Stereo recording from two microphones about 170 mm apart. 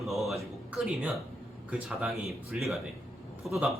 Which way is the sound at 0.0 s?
Centre (ahead or behind).